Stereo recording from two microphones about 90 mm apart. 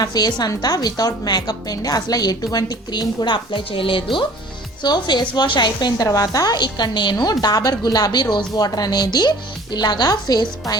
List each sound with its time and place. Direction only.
0.0 s speech: 45° left (ahead or behind); by 4.3 s 70° left (ahead or behind)
4.8 s speech: 55° left (ahead or behind)